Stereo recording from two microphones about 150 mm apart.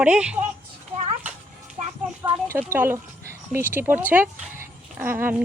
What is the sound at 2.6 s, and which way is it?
Speech, 15° right (ahead or behind).